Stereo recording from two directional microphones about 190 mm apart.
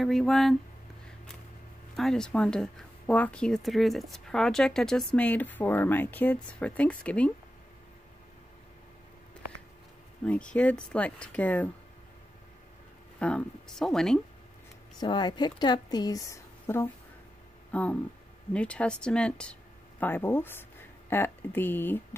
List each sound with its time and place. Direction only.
0.0 s speech: centre (ahead or behind)
2.0 s speech: 5° left (ahead or behind)
10.2 s speech: 5° left (ahead or behind)
13.2 s speech: 5° left (ahead or behind)
15.0 s a woman's voice: 25° left (ahead or behind)